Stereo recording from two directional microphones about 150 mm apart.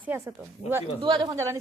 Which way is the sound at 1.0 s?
35° right (ahead or behind).